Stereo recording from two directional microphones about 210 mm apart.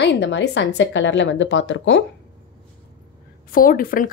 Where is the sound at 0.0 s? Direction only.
55° left (ahead or behind).